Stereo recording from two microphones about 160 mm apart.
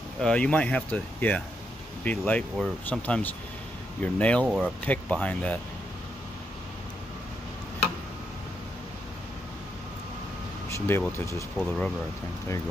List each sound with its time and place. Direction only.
0.2 s speech: 5° left (ahead or behind)
4.5 s speech: 5° right (ahead or behind)
4.8 s speech: 10° left (ahead or behind)
10.7 s speech: 15° left (ahead or behind)
11.5 s speech: 5° left (ahead or behind)